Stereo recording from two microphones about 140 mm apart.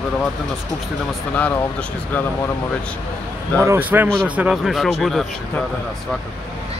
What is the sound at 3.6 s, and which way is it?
A man's voice, 15° right (ahead or behind).